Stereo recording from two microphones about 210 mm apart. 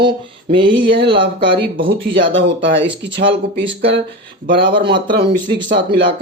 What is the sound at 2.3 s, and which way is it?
Speech, 60° right (ahead or behind).